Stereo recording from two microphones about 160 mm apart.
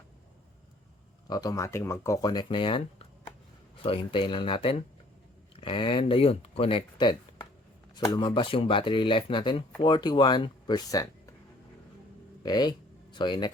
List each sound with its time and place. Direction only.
1.3 s speech: 25° left (ahead or behind)
3.8 s speech: 35° left (ahead or behind)
12.4 s speech: 25° left (ahead or behind)